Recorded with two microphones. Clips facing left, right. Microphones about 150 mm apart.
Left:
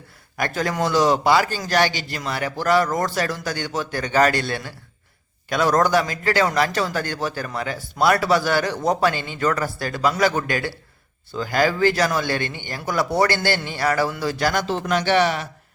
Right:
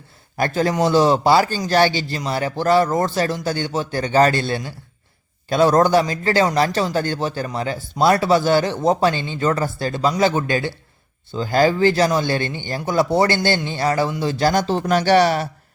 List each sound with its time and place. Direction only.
0.3 s a man's voice: 30° right (ahead or behind)
14.7 s speech: 40° right (ahead or behind)